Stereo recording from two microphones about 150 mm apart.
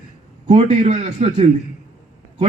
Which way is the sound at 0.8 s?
50° right (ahead or behind).